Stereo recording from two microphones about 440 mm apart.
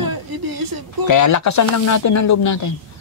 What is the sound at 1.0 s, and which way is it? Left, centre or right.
Speech, left.